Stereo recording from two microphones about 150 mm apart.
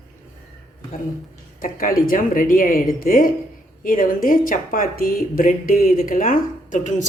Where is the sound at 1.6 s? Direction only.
70° left (ahead or behind).